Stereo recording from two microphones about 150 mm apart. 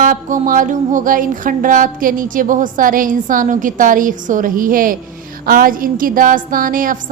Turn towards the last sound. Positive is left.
turn(degrees=-65)  # may be behind; listen again after turning